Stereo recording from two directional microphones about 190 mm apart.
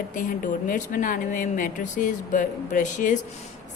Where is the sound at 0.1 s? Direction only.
45° left (ahead or behind).